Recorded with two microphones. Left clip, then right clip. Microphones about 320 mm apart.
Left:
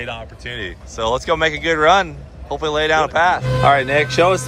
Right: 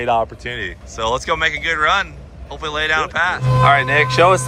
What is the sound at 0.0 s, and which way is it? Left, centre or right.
Speech, centre.